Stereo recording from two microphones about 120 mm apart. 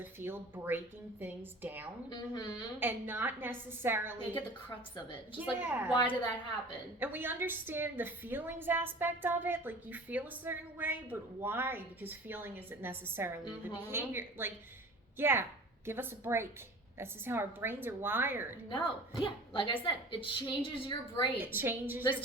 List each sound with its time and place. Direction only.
0.0 s a woman's voice: 20° right (ahead or behind)
2.0 s speech: 35° left (ahead or behind)
2.7 s a woman's voice: 15° right (ahead or behind)
5.4 s a woman's voice: 15° right (ahead or behind)
5.9 s speech: 40° left (ahead or behind)
7.0 s a woman's voice: 15° right (ahead or behind)
18.7 s a woman's voice: 45° left (ahead or behind)
21.4 s a woman's voice: 20° right (ahead or behind)